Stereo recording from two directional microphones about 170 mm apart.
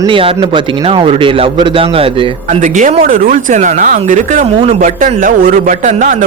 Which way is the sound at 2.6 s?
45° right (ahead or behind).